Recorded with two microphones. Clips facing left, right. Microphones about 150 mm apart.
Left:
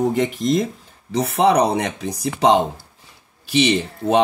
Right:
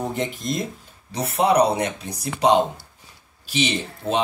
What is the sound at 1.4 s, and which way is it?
Speech, 75° left (ahead or behind).